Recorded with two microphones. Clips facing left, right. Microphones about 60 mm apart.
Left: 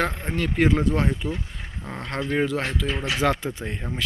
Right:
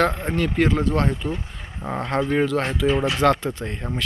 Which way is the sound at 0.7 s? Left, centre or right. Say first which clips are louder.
Right 1 dB; centre.